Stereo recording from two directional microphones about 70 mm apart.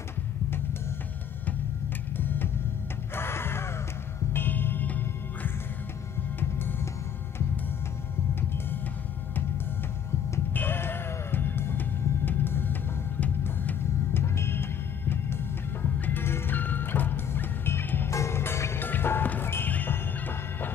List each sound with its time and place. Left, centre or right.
2.1 s music: left
3.2 s a sound: left
4.3 s music: left
10.5 s music: left